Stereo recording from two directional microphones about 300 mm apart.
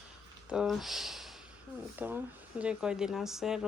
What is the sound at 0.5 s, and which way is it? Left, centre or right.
Speech, centre.